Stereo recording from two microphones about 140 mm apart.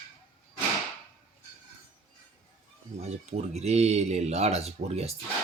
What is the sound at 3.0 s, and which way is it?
Speech, 50° right (ahead or behind).